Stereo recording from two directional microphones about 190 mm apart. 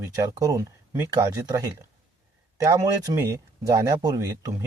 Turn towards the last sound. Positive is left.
turn(degrees=-15)  # may be behind; listen again after turning